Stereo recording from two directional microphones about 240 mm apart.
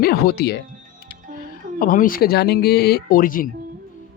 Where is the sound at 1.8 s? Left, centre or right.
Left.